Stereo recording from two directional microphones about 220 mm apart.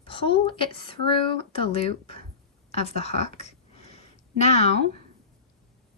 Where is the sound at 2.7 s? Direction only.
30° left (ahead or behind).